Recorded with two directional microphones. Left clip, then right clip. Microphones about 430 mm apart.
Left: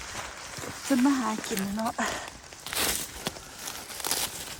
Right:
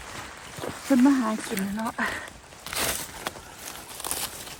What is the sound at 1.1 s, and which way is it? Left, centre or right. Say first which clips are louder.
Speech: right 3 dB; centre.